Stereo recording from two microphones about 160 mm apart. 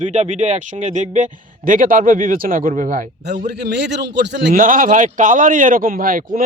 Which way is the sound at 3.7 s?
90° right.